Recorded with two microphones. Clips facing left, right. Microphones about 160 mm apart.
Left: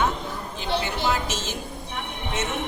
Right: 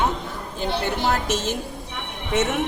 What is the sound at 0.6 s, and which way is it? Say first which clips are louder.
A woman's voice: right 3 dB; 50° right (ahead or behind).